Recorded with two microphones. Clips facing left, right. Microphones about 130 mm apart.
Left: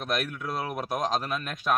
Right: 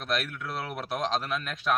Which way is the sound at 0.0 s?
15° left (ahead or behind).